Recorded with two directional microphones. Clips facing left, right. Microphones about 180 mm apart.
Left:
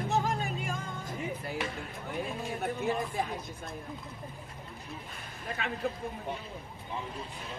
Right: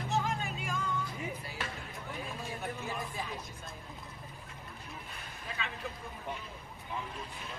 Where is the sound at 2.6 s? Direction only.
55° left (ahead or behind).